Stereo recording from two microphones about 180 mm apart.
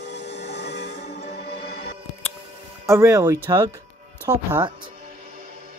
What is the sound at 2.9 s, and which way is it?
Speech, 15° right (ahead or behind).